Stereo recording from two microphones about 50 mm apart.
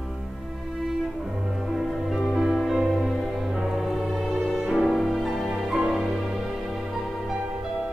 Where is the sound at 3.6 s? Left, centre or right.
Centre.